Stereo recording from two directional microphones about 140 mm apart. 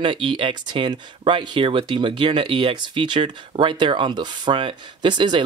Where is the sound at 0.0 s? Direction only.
35° right (ahead or behind).